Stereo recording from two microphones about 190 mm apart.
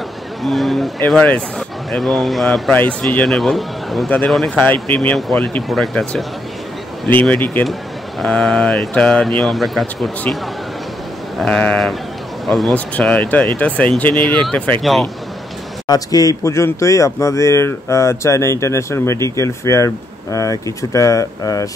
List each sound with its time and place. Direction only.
0.4 s speech: centre (ahead or behind)
11.3 s speech: 5° left (ahead or behind)
15.9 s speech: 20° left (ahead or behind)